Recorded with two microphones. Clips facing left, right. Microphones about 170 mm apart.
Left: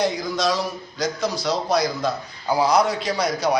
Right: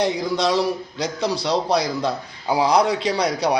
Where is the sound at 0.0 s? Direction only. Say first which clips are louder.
Right 2 dB; 30° right (ahead or behind).